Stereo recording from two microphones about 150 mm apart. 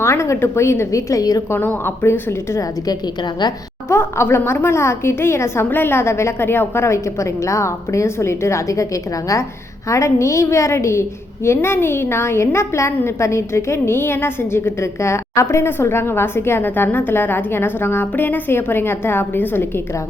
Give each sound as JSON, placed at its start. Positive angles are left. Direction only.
{"t": 0.0, "sound": "a woman's voice", "side_deg": 20}
{"t": 9.9, "sound": "a woman's voice", "side_deg": 20}